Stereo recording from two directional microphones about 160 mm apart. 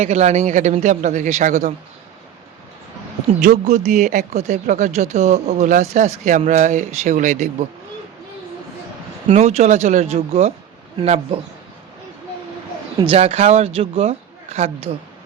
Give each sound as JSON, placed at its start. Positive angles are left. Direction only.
{"t": 0.0, "sound": "speech", "side_deg": -45}
{"t": 3.4, "sound": "speech", "side_deg": -50}
{"t": 9.2, "sound": "speech", "side_deg": -40}
{"t": 13.1, "sound": "speech", "side_deg": -40}